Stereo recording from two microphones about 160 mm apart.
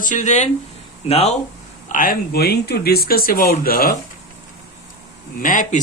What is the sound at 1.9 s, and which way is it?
Speech, 60° left (ahead or behind).